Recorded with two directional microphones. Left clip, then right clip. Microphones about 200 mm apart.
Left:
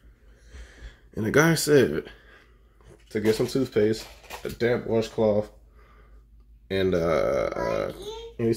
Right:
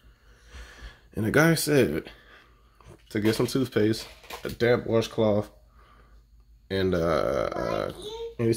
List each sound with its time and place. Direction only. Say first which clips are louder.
0.5 s a sound: right 3 dB; 35° right (ahead or behind)
1.1 s speech: left 1 dB; 15° right (ahead or behind)
3.1 s speech: left 2 dB; 40° right (ahead or behind)
6.7 s speech: left 2 dB; 20° right (ahead or behind)